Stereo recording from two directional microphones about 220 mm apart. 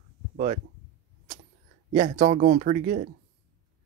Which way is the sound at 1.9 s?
35° right (ahead or behind).